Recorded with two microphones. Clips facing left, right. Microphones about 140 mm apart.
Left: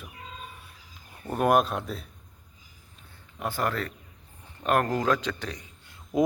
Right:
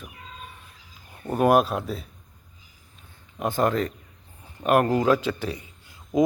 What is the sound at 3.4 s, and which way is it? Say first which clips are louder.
Speech: right 6 dB; 20° right (ahead or behind).